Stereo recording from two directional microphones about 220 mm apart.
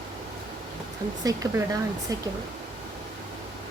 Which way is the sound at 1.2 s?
15° right (ahead or behind).